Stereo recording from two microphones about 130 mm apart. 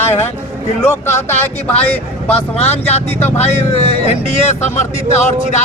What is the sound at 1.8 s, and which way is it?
Speech, 15° left (ahead or behind).